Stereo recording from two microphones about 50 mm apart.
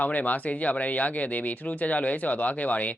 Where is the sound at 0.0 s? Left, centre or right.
Left.